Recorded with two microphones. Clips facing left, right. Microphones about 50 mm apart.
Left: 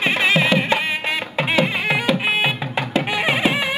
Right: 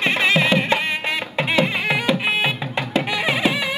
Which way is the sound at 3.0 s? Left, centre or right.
Left.